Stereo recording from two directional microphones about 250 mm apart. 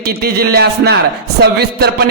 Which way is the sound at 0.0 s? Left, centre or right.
Right.